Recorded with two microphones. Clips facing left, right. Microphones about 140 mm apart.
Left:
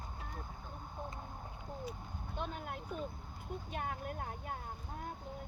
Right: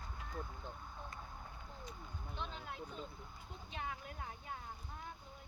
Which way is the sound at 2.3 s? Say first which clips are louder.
Left 5 dB; 50° left (ahead or behind).